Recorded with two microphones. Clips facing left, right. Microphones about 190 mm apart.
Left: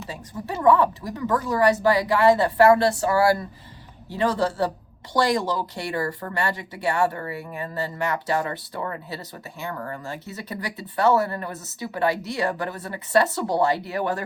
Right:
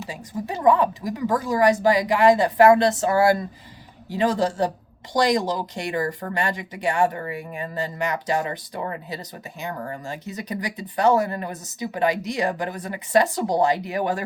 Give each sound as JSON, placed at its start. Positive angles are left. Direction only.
{"t": 0.1, "sound": "speech", "side_deg": -15}